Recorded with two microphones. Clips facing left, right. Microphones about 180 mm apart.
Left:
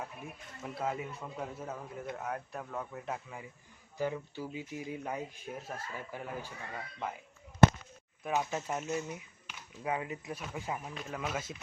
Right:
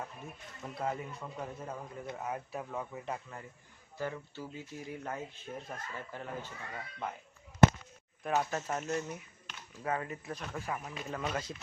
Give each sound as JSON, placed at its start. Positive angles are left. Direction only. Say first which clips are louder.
{"t": 0.0, "sound": "speech", "louder": "left 1 dB", "side_deg": 5}
{"t": 3.9, "sound": "speech", "louder": "left 3 dB", "side_deg": 15}
{"t": 8.2, "sound": "speech", "louder": "right 1 dB", "side_deg": 5}
{"t": 10.8, "sound": "speech", "louder": "right 1 dB", "side_deg": 0}